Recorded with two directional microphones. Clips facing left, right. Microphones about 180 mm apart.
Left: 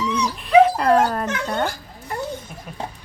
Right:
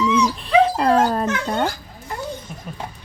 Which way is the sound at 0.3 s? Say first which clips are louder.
Left 2 dB; 30° right (ahead or behind).